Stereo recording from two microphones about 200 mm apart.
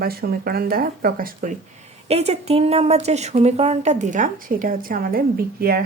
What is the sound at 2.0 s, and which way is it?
A woman's voice, 30° right (ahead or behind).